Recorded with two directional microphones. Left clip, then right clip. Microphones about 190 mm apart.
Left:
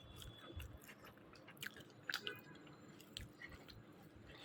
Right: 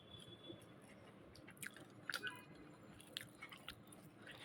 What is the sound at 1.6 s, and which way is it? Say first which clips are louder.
Biting: left 2 dB; centre (ahead or behind).